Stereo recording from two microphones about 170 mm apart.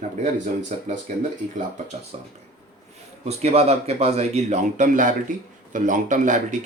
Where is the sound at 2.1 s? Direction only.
40° right (ahead or behind).